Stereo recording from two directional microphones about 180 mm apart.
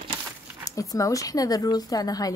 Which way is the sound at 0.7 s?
20° left (ahead or behind).